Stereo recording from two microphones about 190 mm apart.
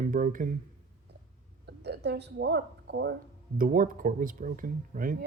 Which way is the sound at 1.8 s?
60° right (ahead or behind).